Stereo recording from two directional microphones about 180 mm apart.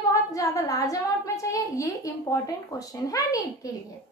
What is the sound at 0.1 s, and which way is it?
A woman's voice, 20° left (ahead or behind).